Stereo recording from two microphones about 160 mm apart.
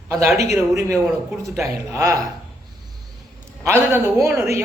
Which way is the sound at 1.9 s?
20° right (ahead or behind).